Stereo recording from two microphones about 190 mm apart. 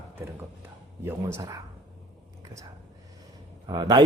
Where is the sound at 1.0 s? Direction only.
15° right (ahead or behind).